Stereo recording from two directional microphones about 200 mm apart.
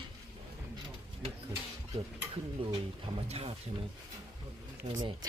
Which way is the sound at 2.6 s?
30° right (ahead or behind).